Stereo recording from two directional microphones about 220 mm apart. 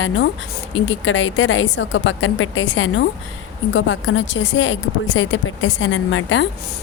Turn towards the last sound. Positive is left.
turn(degrees=60)  # may be behind; listen again after turning